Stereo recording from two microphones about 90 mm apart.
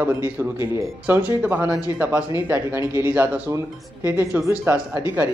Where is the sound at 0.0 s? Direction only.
20° right (ahead or behind).